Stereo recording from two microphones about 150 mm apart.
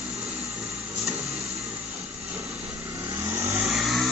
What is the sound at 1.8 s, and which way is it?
Vehicle, 10° right (ahead or behind).